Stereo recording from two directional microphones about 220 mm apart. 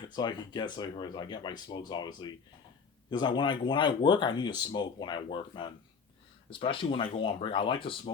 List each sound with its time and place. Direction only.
0.0 s speech: 20° left (ahead or behind)